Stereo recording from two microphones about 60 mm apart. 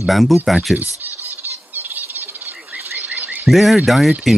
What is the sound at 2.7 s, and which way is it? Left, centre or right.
Frog, right.